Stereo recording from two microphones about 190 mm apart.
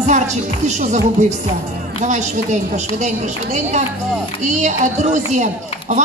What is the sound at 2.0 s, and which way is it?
A man's voice, 40° right (ahead or behind).